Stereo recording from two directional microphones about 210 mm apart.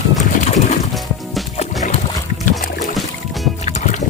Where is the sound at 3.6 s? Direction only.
35° left (ahead or behind).